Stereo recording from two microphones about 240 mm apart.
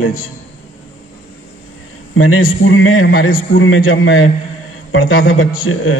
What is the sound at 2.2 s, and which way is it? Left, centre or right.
A man's voice, left.